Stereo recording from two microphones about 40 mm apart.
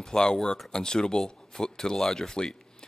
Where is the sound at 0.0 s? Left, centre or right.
Centre.